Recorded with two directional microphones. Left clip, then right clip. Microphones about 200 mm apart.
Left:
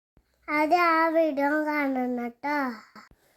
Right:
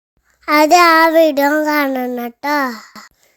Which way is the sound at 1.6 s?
30° right (ahead or behind).